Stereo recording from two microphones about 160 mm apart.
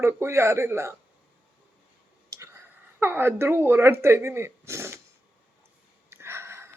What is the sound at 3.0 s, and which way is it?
Speech, 15° right (ahead or behind).